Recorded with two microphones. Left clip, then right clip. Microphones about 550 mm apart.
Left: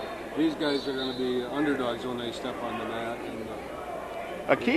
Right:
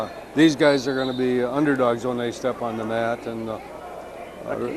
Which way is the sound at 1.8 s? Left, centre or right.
Right.